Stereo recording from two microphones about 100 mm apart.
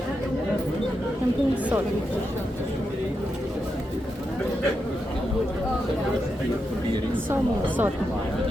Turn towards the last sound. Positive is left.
turn(degrees=-20)  # may be behind; listen again after turning